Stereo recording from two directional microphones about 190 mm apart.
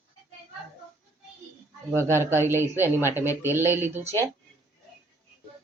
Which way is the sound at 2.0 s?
15° right (ahead or behind).